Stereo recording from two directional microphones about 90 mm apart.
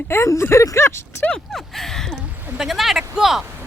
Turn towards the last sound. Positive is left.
turn(degrees=-5)  # may be behind; listen again after turning